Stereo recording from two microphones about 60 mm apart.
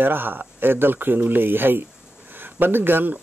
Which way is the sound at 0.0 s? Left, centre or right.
Right.